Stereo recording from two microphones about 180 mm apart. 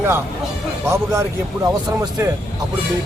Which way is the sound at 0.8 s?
15° right (ahead or behind).